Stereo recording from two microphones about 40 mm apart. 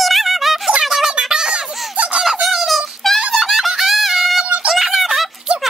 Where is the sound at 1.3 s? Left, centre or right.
Centre.